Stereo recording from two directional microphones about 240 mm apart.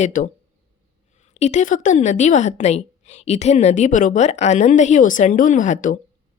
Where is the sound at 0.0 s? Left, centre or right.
Left.